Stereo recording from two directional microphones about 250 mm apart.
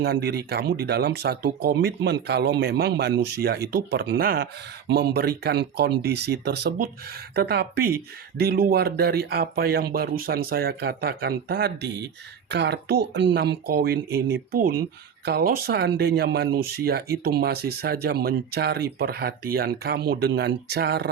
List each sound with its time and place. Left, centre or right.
0.0 s speech: right